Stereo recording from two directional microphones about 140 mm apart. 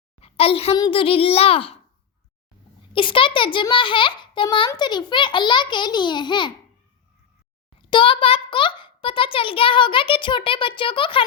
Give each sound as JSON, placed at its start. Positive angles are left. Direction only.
{"t": 0.2, "sound": "a sound", "side_deg": 45}
{"t": 0.8, "sound": "a child's voice", "side_deg": 40}
{"t": 2.9, "sound": "a child's voice", "side_deg": 40}
{"t": 7.9, "sound": "a child's voice", "side_deg": 40}